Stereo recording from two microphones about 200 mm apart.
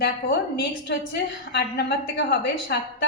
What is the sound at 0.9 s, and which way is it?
A woman's voice, 60° left (ahead or behind).